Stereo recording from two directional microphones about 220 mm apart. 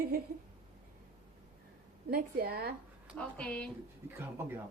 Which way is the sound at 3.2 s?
5° left (ahead or behind).